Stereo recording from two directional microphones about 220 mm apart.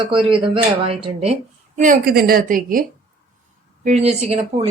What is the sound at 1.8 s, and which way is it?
A woman's voice, 40° right (ahead or behind).